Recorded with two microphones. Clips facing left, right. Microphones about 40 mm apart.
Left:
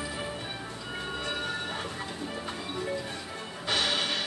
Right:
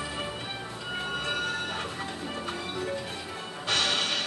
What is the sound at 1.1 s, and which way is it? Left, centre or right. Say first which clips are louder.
Train: right 3 dB; right.